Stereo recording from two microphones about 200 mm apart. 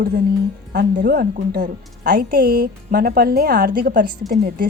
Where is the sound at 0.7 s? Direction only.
50° right (ahead or behind).